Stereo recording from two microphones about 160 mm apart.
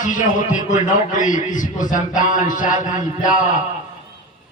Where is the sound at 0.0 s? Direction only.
55° left (ahead or behind).